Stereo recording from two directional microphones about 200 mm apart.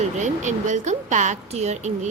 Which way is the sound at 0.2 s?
35° right (ahead or behind).